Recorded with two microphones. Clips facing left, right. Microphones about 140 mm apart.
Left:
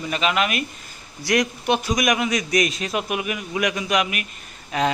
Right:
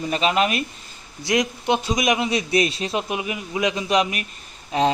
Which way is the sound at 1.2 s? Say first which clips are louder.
Even; 20° right (ahead or behind).